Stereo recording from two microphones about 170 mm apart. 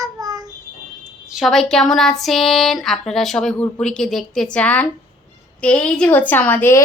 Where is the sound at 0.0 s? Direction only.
20° right (ahead or behind).